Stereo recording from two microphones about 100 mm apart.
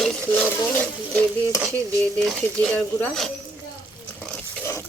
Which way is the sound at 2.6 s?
20° left (ahead or behind).